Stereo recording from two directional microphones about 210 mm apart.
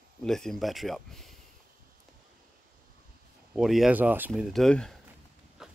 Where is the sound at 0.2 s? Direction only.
Centre (ahead or behind).